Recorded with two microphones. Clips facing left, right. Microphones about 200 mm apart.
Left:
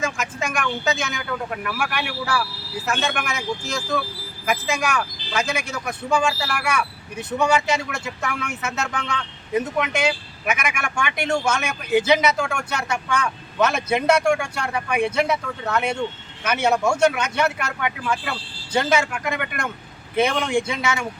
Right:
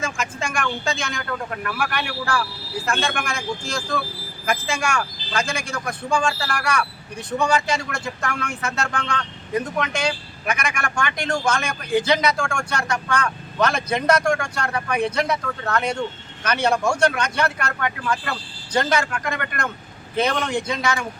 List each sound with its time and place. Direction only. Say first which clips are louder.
0.0 s speech: left 1 dB; 5° left (ahead or behind)